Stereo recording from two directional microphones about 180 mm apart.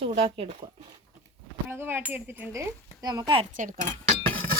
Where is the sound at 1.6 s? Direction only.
10° right (ahead or behind).